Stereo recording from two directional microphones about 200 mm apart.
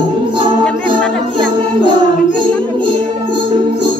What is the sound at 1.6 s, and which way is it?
Music, 25° right (ahead or behind).